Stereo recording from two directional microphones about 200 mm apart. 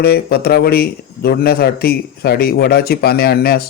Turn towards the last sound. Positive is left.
turn(degrees=50)  # may be behind; listen again after turning